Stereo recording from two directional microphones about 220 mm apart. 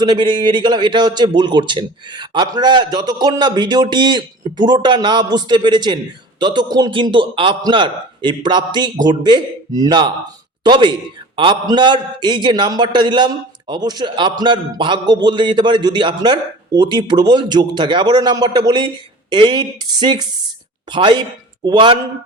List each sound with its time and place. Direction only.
0.0 s a man's voice: 20° right (ahead or behind)